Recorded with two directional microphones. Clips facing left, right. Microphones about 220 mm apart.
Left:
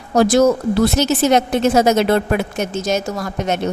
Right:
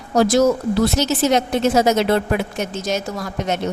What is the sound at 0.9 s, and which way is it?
A woman's voice, 55° left (ahead or behind).